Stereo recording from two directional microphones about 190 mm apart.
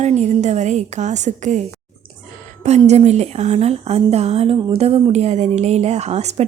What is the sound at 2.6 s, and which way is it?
Speech, 35° right (ahead or behind).